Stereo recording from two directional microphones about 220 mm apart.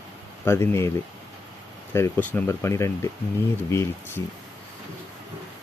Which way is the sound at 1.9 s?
10° left (ahead or behind).